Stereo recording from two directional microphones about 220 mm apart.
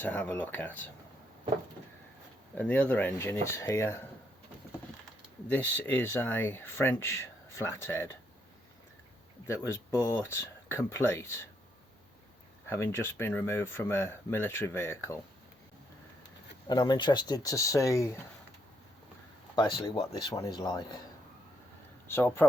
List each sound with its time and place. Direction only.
0.0 s speech: 10° left (ahead or behind)
2.6 s speech: 5° left (ahead or behind)
5.5 s speech: 10° left (ahead or behind)
9.5 s speech: 10° left (ahead or behind)
12.6 s speech: 10° left (ahead or behind)
16.6 s speech: 20° left (ahead or behind)
19.5 s speech: 20° left (ahead or behind)
22.0 s speech: 10° left (ahead or behind)